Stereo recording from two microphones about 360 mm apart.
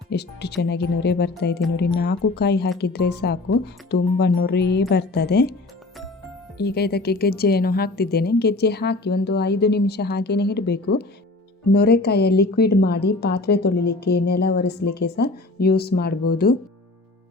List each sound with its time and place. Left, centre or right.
0.1 s a woman's voice: left
6.6 s a woman's voice: left